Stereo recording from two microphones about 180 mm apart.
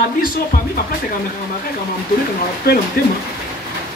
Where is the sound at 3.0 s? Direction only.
55° left (ahead or behind).